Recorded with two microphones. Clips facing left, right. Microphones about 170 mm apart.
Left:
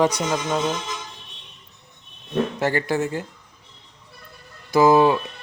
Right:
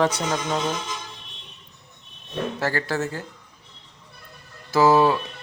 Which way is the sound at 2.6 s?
20° left (ahead or behind).